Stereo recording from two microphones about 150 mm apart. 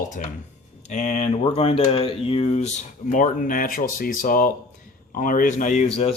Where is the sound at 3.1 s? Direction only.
65° left (ahead or behind).